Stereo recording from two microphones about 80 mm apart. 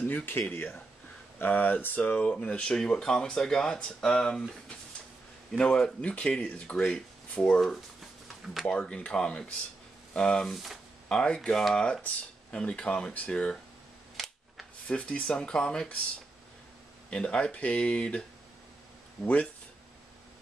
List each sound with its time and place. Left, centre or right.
0.1 s speech: left; by 10.8 s centre
11.1 s speech: centre
14.1 s camera: centre
14.9 s speech: centre
17.1 s speech: centre